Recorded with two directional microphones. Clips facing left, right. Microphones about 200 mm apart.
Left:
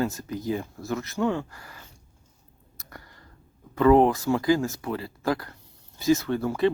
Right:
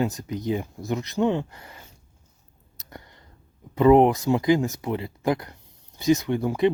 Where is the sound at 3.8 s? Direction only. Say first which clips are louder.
Right 2 dB; 20° right (ahead or behind).